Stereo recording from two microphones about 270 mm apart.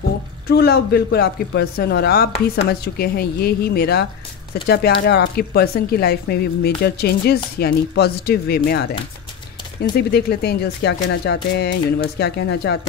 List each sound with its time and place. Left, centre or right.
0.5 s speech: left
9.9 s speech: left